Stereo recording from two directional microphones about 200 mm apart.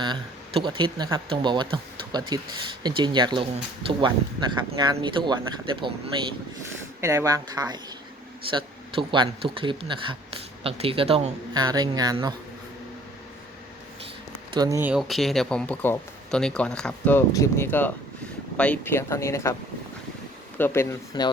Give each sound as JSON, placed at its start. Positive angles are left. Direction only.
{"t": 0.0, "sound": "speech", "side_deg": -25}
{"t": 7.0, "sound": "speech", "side_deg": -15}
{"t": 14.5, "sound": "speech", "side_deg": -20}
{"t": 20.6, "sound": "speech", "side_deg": 10}